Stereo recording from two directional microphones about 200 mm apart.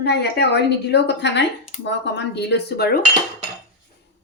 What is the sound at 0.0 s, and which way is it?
Speech, 55° left (ahead or behind).